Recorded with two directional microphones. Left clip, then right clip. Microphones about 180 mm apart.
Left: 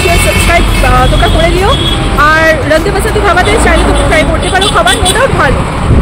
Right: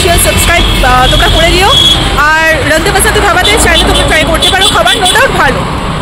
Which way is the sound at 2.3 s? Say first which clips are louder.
Left 1 dB; centre (ahead or behind).